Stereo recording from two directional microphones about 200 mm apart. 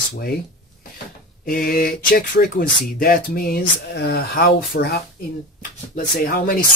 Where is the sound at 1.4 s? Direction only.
45° left (ahead or behind).